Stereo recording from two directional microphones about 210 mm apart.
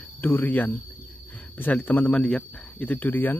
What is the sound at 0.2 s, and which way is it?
Speech, 10° left (ahead or behind).